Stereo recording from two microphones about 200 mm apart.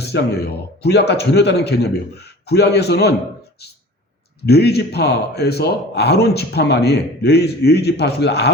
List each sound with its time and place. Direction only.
0.0 s a man's voice: 55° left (ahead or behind)
4.4 s a man's voice: 55° left (ahead or behind)